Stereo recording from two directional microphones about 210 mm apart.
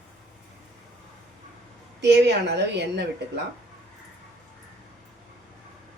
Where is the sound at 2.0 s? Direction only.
55° right (ahead or behind).